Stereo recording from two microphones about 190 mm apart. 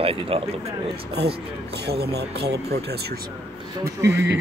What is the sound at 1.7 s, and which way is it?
Speech, 60° right (ahead or behind).